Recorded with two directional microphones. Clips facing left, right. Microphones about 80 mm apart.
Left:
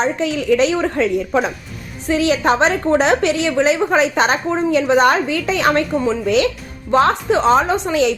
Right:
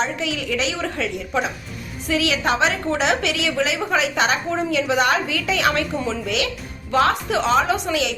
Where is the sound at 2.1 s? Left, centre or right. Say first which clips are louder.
Left 5 dB; left.